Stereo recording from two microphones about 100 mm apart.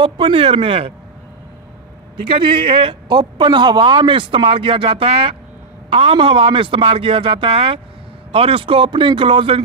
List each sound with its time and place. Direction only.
0.0 s speech: 65° right (ahead or behind)
2.2 s a man's voice: 60° right (ahead or behind)